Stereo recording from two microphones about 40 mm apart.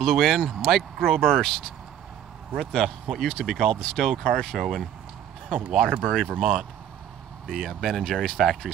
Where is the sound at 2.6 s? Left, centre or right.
Centre.